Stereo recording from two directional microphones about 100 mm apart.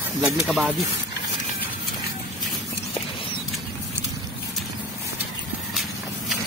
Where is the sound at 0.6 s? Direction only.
10° right (ahead or behind).